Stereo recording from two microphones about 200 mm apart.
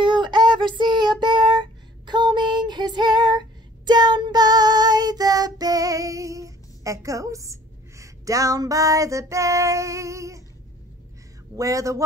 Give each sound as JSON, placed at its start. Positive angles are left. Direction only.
{"t": 0.0, "sound": "child singing", "side_deg": -25}
{"t": 8.0, "sound": "female singing", "side_deg": -15}
{"t": 11.5, "sound": "speech", "side_deg": -15}